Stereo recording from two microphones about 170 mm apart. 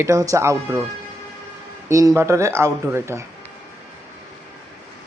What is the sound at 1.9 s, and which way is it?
A man's voice, 20° right (ahead or behind).